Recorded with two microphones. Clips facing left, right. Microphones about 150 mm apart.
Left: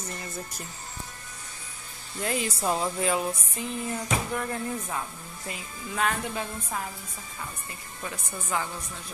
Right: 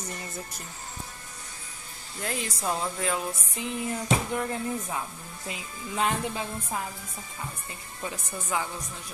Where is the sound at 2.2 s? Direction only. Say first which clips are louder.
Left 4 dB; 5° left (ahead or behind).